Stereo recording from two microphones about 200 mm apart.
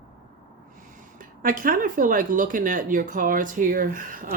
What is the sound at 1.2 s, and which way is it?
Speech, 45° right (ahead or behind).